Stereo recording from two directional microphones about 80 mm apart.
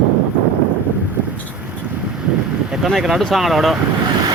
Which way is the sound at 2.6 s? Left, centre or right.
Centre.